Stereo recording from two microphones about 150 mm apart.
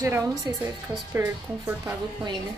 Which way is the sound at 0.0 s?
20° right (ahead or behind).